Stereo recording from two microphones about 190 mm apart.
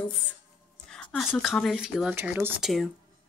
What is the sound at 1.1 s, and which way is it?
Speech, centre (ahead or behind).